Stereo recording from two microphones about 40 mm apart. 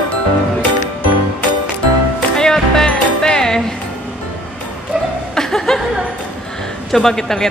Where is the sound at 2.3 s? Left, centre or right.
Centre.